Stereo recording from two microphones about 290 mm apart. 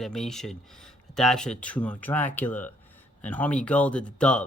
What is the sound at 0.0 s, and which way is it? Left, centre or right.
Speech, centre.